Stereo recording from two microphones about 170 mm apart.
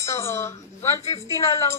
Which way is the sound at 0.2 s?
15° left (ahead or behind).